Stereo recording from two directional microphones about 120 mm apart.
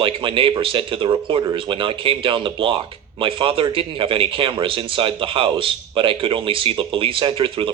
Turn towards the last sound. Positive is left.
turn(degrees=-45)  # may be behind; listen again after turning